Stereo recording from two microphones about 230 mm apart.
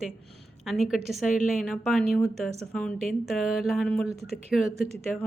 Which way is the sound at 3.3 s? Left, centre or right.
Centre.